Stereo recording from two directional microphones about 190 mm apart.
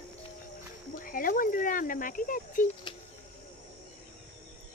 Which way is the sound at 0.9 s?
45° left (ahead or behind).